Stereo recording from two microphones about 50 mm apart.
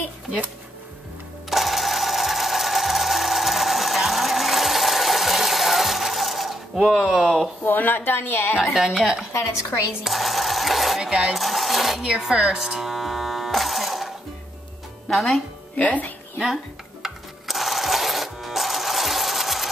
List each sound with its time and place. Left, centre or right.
1.5 s sewing machine: centre
7.6 s a woman's voice: left
8.7 s speech: centre
10.0 s sewing machine: centre
11.0 s speech: centre
11.3 s speech: centre
12.1 s electric shaver: centre
15.0 s speech: centre
15.7 s speech: left
17.0 s a sound: centre